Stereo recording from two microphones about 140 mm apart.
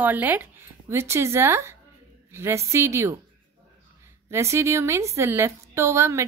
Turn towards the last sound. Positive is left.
turn(degrees=-20)  # may be behind; listen again after turning